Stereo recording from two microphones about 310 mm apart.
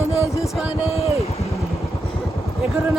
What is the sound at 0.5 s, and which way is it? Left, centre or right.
Speech, centre.